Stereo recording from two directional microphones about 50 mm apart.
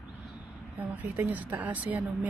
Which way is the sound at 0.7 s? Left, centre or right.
Right.